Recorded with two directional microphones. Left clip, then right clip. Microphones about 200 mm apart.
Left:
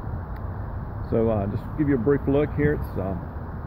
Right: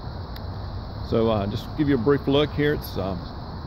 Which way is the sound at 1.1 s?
30° right (ahead or behind).